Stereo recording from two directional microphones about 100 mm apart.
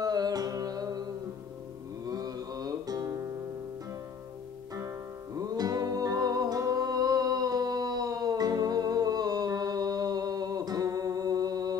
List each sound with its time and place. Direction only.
0.0 s music: 40° right (ahead or behind)
2.0 s music: 40° right (ahead or behind)
4.7 s music: 35° right (ahead or behind)